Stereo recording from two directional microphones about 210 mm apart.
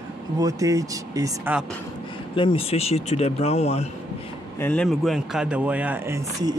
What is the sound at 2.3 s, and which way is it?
Speech, 25° left (ahead or behind).